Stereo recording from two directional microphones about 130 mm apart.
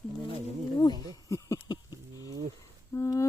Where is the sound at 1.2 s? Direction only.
25° left (ahead or behind).